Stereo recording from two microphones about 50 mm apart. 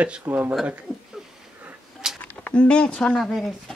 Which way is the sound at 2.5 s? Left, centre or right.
Left.